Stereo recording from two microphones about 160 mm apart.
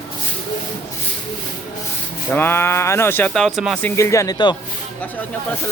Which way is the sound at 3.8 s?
15° left (ahead or behind).